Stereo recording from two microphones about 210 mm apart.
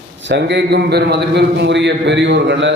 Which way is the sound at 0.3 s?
55° right (ahead or behind).